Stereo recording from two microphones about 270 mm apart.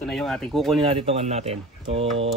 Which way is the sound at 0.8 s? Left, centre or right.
Right.